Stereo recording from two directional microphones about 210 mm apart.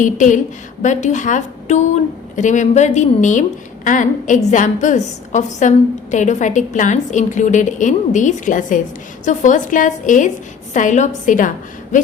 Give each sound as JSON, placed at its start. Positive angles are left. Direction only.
{"t": 0.0, "sound": "a woman's voice", "side_deg": 35}